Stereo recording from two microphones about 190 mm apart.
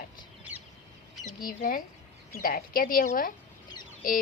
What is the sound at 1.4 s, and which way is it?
A woman's voice, 50° left (ahead or behind).